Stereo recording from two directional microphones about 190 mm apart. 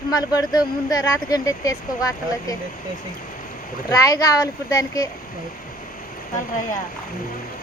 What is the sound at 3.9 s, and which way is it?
Speech, 20° left (ahead or behind).